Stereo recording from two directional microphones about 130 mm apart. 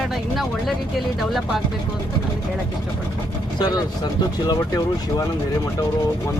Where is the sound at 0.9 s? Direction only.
Centre (ahead or behind).